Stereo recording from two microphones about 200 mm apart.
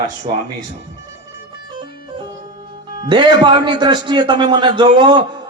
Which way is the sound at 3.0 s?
20° right (ahead or behind).